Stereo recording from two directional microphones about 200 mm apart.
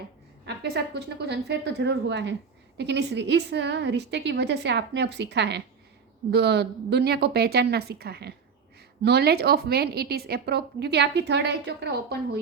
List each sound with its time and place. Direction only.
0.4 s a woman's voice: 55° right (ahead or behind)